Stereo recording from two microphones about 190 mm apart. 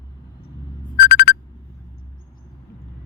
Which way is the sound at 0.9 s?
50° left (ahead or behind).